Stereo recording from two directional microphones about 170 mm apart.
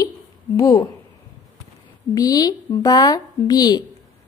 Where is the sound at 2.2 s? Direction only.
20° left (ahead or behind).